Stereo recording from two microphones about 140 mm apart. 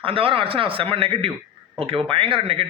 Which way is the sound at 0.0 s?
40° right (ahead or behind).